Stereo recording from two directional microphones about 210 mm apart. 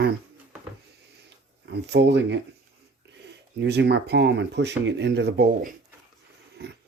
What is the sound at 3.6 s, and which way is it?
Speech, 55° right (ahead or behind).